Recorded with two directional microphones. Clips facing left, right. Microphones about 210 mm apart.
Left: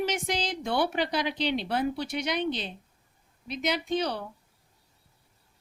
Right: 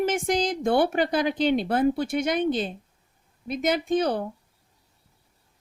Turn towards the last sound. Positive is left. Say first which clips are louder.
# right 6 dB
turn(degrees=-50)  # may be behind; listen again after turning